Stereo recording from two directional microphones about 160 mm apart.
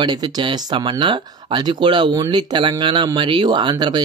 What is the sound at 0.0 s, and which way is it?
Speech, 30° right (ahead or behind).